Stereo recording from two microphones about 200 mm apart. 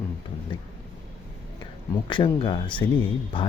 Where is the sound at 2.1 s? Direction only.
25° left (ahead or behind).